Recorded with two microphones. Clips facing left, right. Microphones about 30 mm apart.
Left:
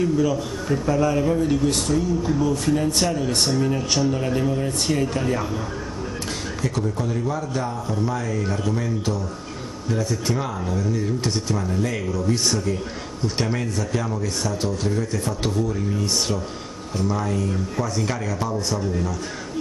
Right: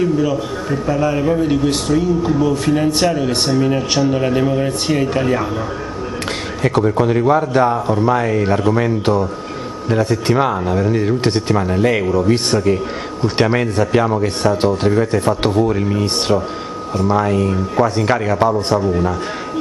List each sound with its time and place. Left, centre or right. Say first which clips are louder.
0.0 s a man's voice: right 4 dB; right
6.6 s speech: right 12 dB; right